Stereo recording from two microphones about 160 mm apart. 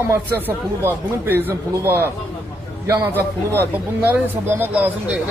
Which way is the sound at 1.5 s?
15° right (ahead or behind).